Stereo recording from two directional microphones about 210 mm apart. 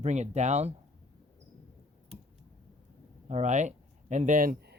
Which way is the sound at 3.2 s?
35° right (ahead or behind).